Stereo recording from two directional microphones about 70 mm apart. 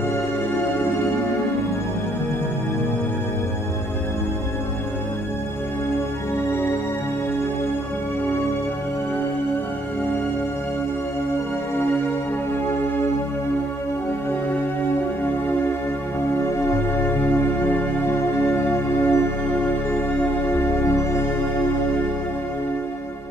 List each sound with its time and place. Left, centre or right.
17.1 s music: left
20.4 s music: left